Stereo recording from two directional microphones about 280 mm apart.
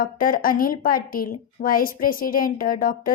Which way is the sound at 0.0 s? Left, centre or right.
Left.